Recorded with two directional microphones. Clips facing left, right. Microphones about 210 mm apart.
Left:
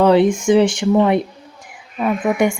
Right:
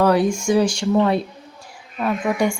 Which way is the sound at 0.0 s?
25° left (ahead or behind).